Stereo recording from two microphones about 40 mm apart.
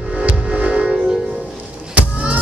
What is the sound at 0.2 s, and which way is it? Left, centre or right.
Music, centre.